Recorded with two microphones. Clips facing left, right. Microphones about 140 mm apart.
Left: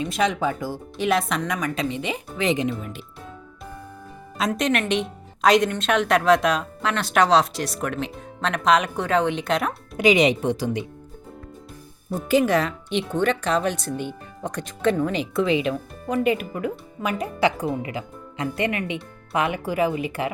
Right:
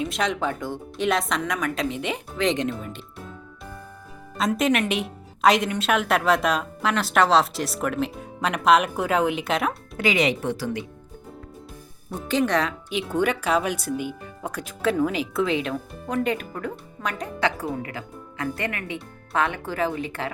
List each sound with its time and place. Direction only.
0.0 s a woman's voice: centre (ahead or behind)
4.4 s a woman's voice: centre (ahead or behind)
10.0 s speech: 20° left (ahead or behind)
12.3 s a woman's voice: 5° left (ahead or behind)
17.6 s a woman's voice: 20° left (ahead or behind)